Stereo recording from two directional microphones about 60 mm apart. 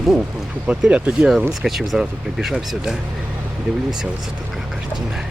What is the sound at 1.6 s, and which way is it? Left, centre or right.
Speech, centre.